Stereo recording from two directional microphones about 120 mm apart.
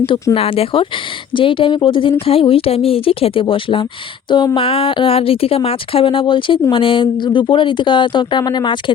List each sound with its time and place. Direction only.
0.3 s speech: 50° left (ahead or behind)